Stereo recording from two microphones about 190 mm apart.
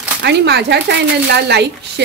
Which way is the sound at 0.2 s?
60° right (ahead or behind).